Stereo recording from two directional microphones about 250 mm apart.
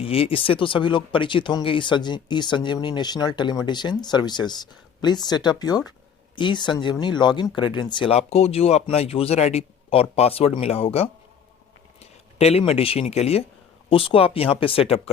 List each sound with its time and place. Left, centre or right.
0.0 s speech: left